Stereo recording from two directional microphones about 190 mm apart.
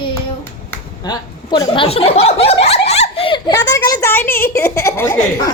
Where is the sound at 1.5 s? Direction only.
25° left (ahead or behind).